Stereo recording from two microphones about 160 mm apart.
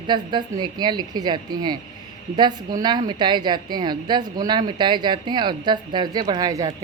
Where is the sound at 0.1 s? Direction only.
30° right (ahead or behind).